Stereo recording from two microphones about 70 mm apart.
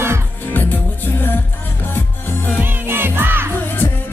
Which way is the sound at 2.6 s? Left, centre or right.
Right.